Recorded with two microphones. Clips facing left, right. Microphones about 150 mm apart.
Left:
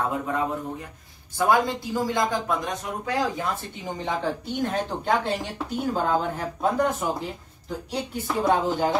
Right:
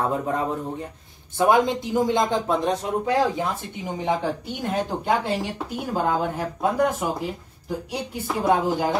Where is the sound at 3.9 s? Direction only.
15° right (ahead or behind).